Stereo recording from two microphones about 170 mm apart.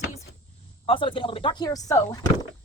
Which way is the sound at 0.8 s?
30° left (ahead or behind).